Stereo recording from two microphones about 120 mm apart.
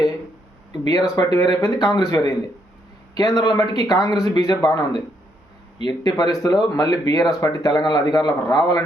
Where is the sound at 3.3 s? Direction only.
35° left (ahead or behind).